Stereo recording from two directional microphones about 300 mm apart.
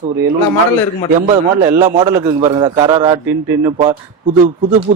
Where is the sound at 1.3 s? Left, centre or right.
Centre.